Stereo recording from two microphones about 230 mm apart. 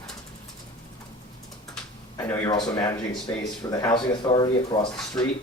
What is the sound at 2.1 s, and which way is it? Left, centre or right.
Speech, centre.